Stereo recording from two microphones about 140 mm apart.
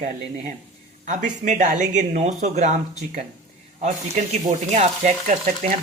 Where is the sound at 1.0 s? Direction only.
60° right (ahead or behind).